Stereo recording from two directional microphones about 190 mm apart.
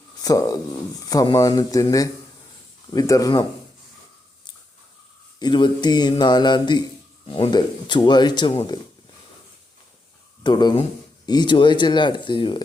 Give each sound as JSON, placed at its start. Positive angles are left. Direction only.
{"t": 0.2, "sound": "speech", "side_deg": 20}
{"t": 5.4, "sound": "speech", "side_deg": 25}
{"t": 10.4, "sound": "speech", "side_deg": 25}